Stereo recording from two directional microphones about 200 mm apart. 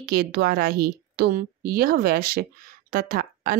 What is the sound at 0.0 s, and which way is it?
A woman's voice, 50° right (ahead or behind).